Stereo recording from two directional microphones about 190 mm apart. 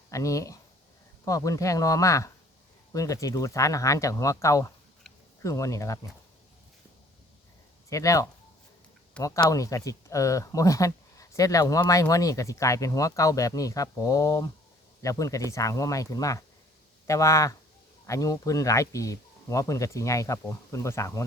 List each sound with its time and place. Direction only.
0.1 s speech: 15° left (ahead or behind)
7.9 s speech: 15° left (ahead or behind)